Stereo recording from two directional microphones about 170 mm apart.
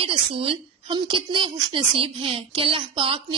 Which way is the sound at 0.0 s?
35° right (ahead or behind).